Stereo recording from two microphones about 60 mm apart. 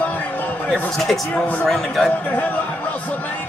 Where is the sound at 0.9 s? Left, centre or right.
Centre.